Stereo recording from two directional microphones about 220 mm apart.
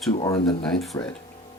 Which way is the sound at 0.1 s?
25° left (ahead or behind).